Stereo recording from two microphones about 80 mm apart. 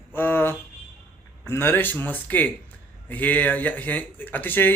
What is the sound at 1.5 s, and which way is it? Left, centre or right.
Speech, left.